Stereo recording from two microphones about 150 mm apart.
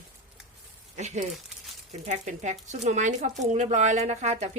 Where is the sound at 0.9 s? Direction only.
50° right (ahead or behind).